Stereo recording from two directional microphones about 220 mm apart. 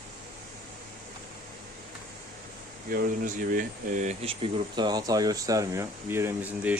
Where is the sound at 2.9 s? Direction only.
40° right (ahead or behind).